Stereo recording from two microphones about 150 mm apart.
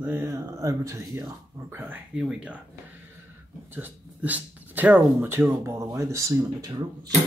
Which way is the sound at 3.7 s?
10° right (ahead or behind).